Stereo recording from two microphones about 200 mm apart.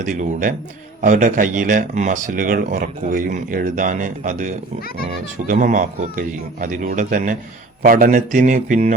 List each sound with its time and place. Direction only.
0.0 s speech: 40° right (ahead or behind)